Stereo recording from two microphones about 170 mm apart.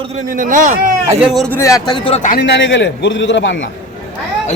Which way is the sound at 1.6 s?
20° left (ahead or behind).